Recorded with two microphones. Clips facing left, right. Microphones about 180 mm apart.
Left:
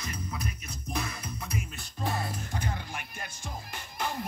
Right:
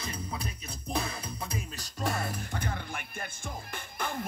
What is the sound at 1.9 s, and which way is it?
Music, 85° right.